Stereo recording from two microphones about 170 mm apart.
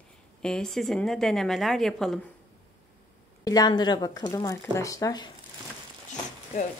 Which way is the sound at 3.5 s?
25° left (ahead or behind).